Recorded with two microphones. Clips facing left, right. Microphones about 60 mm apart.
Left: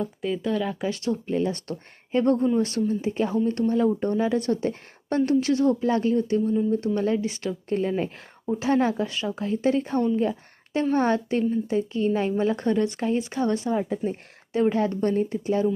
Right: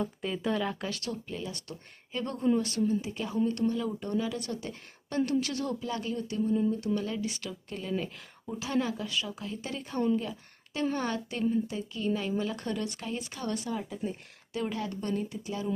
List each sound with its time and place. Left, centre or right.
0.0 s speech: centre
0.9 s a woman's voice: left
13.9 s a woman's voice: left